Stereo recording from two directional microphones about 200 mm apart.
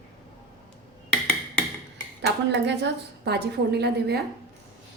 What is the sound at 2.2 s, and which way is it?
A woman's voice, 60° right (ahead or behind).